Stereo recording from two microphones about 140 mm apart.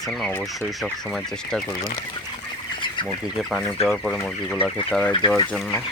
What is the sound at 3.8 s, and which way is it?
Speech, 5° left (ahead or behind).